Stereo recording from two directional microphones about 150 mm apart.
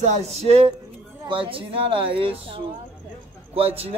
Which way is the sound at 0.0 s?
55° right (ahead or behind).